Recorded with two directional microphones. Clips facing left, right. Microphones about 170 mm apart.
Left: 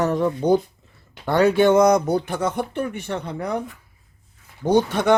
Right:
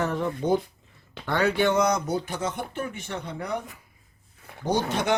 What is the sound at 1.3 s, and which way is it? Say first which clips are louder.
Speech: left 7 dB; 40° left (ahead or behind).